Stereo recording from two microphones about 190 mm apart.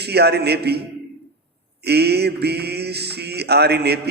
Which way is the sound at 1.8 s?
60° right (ahead or behind).